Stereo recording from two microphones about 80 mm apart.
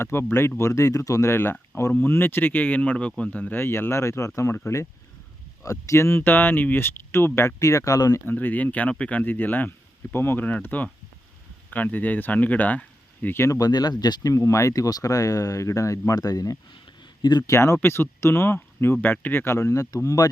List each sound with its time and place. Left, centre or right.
0.0 s speech: left
1.9 s speech: left
3.6 s speech: left
8.3 s speech: left
13.3 s speech: left
13.6 s speech: left
14.3 s speech: left
17.0 s a sound: left
17.4 s speech: left
19.5 s speech: left